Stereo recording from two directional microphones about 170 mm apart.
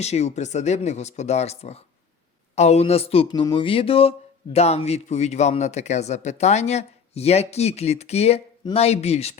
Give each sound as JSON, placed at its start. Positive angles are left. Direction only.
{"t": 0.0, "sound": "speech", "side_deg": 40}